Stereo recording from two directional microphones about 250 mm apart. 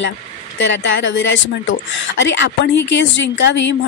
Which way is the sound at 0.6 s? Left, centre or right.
Left.